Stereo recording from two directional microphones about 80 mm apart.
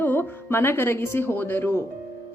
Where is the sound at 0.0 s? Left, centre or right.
Left.